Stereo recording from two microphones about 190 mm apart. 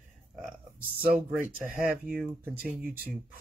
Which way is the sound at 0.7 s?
50° right (ahead or behind).